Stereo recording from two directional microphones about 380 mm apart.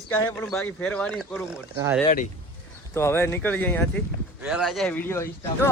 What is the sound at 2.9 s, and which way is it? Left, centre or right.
A man's voice, centre.